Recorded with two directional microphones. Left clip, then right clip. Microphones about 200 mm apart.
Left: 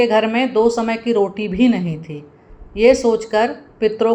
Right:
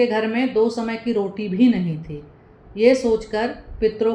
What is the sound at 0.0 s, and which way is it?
Speech, 20° left (ahead or behind).